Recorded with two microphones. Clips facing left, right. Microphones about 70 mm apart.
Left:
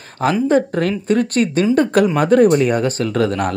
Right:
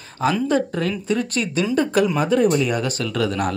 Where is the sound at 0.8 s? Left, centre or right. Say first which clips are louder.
Left 5 dB; left.